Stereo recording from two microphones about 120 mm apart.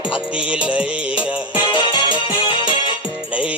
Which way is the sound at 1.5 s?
45° left (ahead or behind).